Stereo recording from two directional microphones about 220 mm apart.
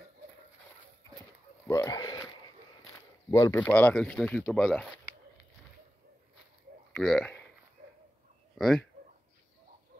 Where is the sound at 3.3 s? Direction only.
15° left (ahead or behind).